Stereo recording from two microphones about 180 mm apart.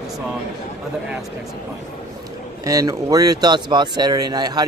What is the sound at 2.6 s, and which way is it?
Speech, 20° right (ahead or behind).